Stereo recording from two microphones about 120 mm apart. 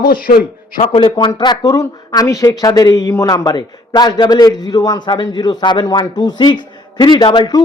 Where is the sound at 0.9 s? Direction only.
40° left (ahead or behind).